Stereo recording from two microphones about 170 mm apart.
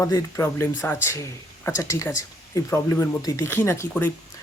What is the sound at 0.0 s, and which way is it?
Speech, 20° left (ahead or behind).